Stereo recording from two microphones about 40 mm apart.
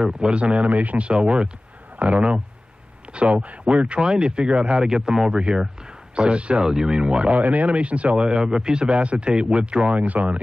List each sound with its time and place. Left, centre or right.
0.3 s speech: right
0.7 s speech: right
6.6 s speech: centre
7.3 s speech: right; by 8.9 s centre
8.9 s speech: right
9.3 s speech: right